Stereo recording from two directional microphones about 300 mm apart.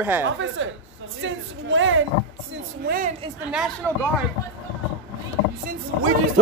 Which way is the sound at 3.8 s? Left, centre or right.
Centre.